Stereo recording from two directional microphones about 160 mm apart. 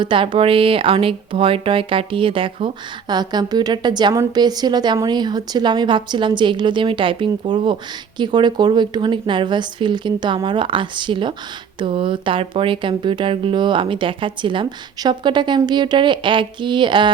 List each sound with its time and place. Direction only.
0.0 s speech: 30° right (ahead or behind)